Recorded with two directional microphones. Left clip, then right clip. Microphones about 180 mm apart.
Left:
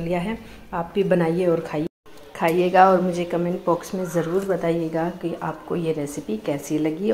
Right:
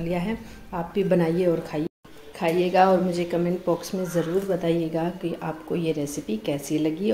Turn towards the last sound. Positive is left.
turn(degrees=0)  # may be behind; listen again after turning